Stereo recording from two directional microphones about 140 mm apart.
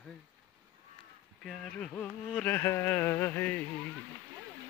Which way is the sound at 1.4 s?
5° left (ahead or behind).